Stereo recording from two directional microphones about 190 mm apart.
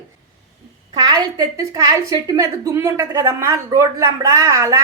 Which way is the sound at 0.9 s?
20° right (ahead or behind).